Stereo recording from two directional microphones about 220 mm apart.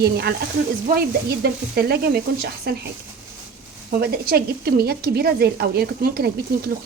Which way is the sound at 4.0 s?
45° right (ahead or behind).